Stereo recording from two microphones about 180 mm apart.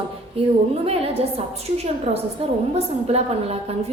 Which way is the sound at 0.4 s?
35° right (ahead or behind).